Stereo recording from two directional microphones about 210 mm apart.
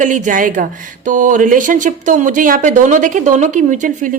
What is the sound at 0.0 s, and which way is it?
Speech, 40° right (ahead or behind).